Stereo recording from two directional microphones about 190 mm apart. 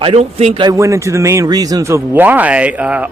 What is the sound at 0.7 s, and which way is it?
Speech, 15° right (ahead or behind).